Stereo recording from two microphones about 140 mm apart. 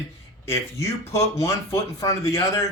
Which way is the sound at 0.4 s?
20° left (ahead or behind).